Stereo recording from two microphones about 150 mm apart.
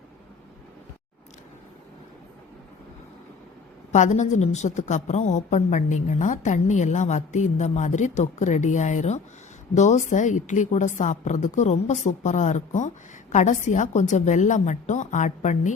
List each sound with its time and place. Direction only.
3.9 s a woman's voice: 55° left (ahead or behind)